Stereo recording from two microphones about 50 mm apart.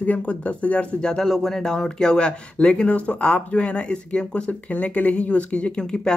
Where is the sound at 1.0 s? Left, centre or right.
Centre.